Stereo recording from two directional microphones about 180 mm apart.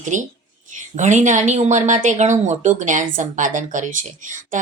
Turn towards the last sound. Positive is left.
turn(degrees=-45)  # may be behind; listen again after turning